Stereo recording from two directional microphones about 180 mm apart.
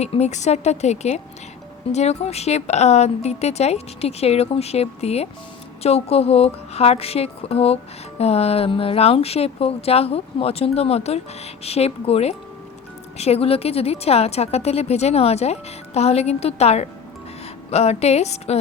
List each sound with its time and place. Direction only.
0.0 s speech: 35° left (ahead or behind)